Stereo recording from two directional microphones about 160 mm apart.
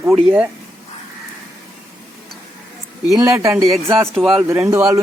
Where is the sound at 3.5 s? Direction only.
Centre (ahead or behind).